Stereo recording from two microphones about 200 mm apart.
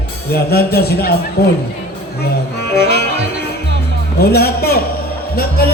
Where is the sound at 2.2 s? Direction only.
55° left (ahead or behind).